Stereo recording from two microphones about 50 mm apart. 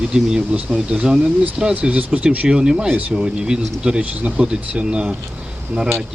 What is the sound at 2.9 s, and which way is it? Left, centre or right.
Speech, right.